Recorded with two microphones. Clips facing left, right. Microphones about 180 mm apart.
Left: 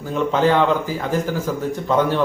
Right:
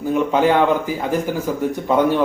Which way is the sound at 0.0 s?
10° right (ahead or behind).